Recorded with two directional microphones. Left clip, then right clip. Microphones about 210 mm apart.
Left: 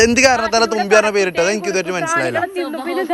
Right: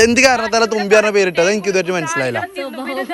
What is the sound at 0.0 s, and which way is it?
A man's voice, 10° left (ahead or behind).